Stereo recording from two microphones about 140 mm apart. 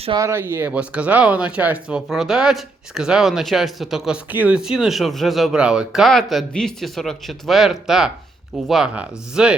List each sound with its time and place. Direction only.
0.2 s speech: 20° right (ahead or behind)